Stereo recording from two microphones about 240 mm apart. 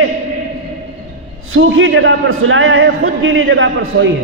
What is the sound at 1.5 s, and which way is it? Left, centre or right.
A man's voice, right.